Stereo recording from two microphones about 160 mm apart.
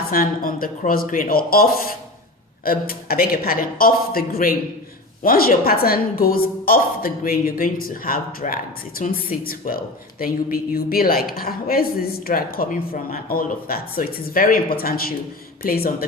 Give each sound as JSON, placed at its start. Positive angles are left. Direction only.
{"t": 0.1, "sound": "a woman's voice", "side_deg": 60}
{"t": 2.6, "sound": "a woman's voice", "side_deg": 65}